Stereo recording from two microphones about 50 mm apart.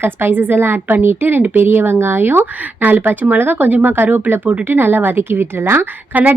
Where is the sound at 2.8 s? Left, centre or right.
Right.